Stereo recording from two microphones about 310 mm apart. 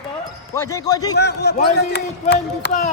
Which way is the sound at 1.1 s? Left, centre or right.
Left.